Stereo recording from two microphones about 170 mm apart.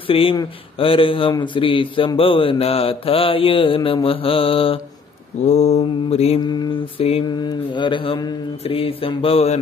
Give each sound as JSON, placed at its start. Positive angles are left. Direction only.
{"t": 0.0, "sound": "speech", "side_deg": 35}
{"t": 6.4, "sound": "speech", "side_deg": 25}